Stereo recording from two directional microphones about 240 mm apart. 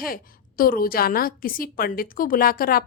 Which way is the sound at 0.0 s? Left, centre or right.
Left.